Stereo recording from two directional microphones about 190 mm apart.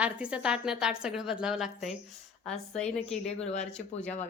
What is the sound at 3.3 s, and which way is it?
Speech, 35° left (ahead or behind).